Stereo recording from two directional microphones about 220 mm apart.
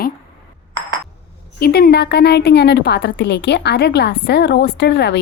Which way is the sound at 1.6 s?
45° left (ahead or behind).